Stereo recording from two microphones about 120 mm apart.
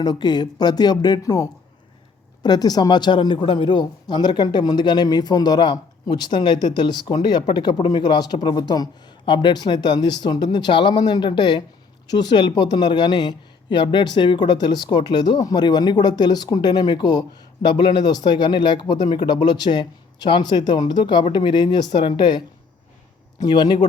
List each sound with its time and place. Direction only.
0.0 s a man's voice: 35° left (ahead or behind)